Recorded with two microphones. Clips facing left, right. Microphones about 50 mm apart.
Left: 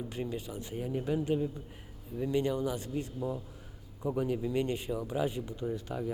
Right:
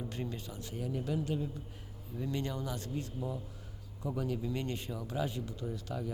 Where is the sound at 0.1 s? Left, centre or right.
Centre.